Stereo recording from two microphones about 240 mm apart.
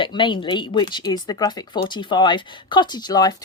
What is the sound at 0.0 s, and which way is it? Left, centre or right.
Speech, centre.